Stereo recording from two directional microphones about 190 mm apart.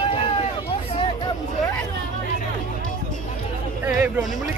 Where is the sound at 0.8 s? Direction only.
25° left (ahead or behind).